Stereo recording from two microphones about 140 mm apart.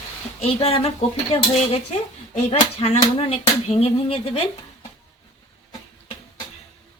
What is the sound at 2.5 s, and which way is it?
Speech, 50° left (ahead or behind).